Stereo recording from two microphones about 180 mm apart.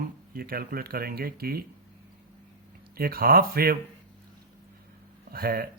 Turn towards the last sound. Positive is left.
turn(degrees=-55)  # may be behind; listen again after turning